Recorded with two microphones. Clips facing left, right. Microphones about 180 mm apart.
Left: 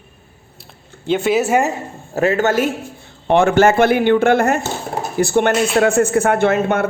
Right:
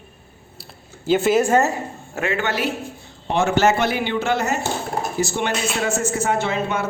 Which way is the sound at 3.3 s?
55° left (ahead or behind).